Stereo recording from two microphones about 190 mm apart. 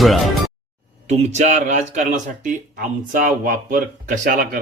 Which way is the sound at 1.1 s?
35° right (ahead or behind).